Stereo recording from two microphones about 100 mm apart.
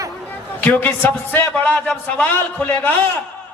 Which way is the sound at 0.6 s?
15° left (ahead or behind).